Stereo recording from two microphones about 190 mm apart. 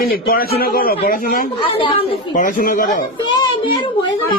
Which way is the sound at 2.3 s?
45° left (ahead or behind).